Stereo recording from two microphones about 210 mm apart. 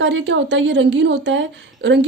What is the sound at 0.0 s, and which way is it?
A woman's voice, 60° right (ahead or behind).